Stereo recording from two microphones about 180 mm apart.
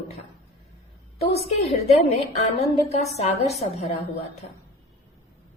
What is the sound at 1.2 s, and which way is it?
A woman's voice, 35° left (ahead or behind).